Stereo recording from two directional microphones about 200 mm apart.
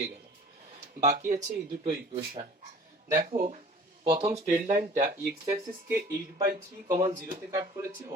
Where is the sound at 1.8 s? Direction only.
25° right (ahead or behind).